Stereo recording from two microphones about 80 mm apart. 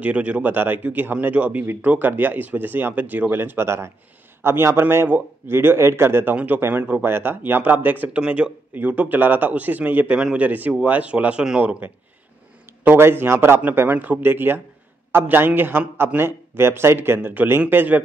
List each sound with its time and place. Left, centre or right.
0.0 s speech: centre
12.8 s speech: right
13.7 s speech: right